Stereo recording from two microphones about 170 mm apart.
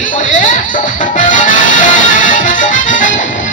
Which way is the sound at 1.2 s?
50° left (ahead or behind).